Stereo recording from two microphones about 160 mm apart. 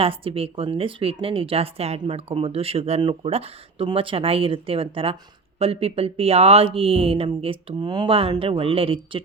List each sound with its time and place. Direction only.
0.0 s speech: 35° right (ahead or behind)